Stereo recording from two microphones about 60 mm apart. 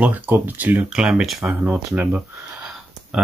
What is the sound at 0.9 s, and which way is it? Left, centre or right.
Speech, centre.